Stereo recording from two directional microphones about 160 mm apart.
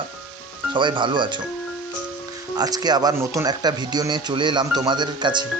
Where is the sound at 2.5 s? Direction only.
25° right (ahead or behind).